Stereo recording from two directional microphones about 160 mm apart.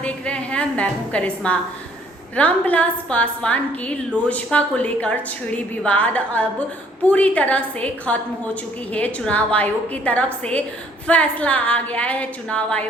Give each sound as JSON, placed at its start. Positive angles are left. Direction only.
{"t": 0.0, "sound": "a woman's voice", "side_deg": 5}